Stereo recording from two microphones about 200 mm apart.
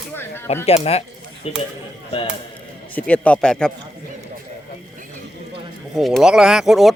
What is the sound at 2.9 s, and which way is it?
Speech, 5° left (ahead or behind).